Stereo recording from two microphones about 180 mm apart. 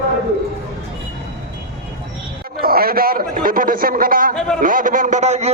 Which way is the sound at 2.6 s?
55° right (ahead or behind).